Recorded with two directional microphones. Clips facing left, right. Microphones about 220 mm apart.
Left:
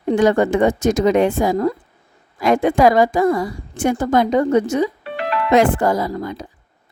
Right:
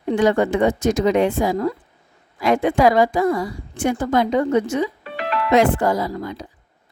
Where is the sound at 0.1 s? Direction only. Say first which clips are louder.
Left 2 dB; 45° left (ahead or behind).